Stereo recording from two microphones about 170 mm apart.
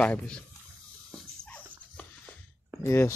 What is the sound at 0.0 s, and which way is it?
Speech, 5° left (ahead or behind).